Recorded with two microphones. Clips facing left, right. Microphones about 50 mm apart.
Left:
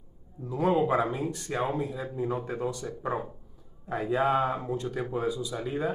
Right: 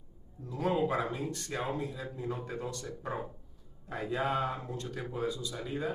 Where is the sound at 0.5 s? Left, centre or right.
Centre.